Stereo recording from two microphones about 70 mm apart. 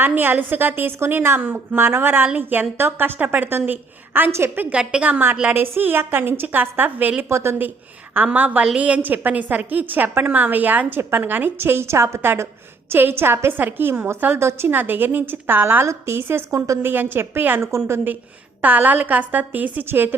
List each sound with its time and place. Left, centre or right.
0.0 s a woman's voice: right
4.7 s a woman's voice: centre
5.5 s a woman's voice: right
7.3 s a woman's voice: right
8.1 s a woman's voice: right
14.3 s a woman's voice: right
16.5 s a woman's voice: right
16.9 s a woman's voice: right
18.6 s a woman's voice: right